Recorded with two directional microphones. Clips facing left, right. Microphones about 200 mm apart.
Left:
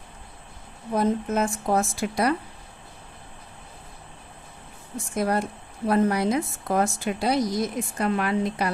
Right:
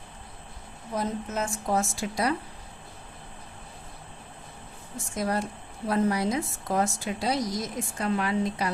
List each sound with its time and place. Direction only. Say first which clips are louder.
0.9 s a woman's voice: left 7 dB; 55° left (ahead or behind)
5.1 s a woman's voice: left 4 dB; 60° left (ahead or behind)